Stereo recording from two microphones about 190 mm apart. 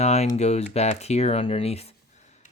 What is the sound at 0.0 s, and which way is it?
Speech, 35° left (ahead or behind).